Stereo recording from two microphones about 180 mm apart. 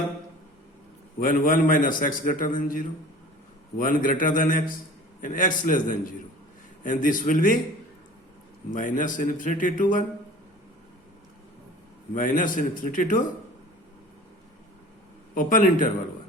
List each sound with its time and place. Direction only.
1.2 s a man's voice: 50° left (ahead or behind)
8.7 s a man's voice: 45° left (ahead or behind)
12.1 s a man's voice: 50° left (ahead or behind)
15.4 s a man's voice: 50° left (ahead or behind)